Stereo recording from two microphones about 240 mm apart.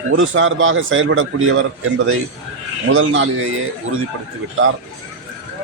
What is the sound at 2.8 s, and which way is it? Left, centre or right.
Speech, right.